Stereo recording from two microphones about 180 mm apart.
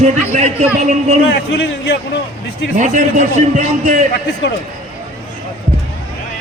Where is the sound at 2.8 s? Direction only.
45° right (ahead or behind).